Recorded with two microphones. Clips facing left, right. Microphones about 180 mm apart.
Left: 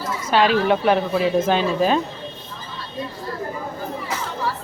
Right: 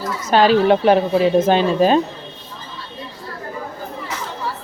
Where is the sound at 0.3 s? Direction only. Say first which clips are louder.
Right 4 dB; 40° right (ahead or behind).